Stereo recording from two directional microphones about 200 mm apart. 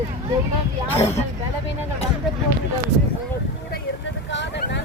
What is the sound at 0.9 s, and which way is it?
Speech, 30° left (ahead or behind).